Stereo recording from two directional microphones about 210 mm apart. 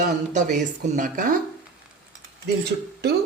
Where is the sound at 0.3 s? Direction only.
35° right (ahead or behind).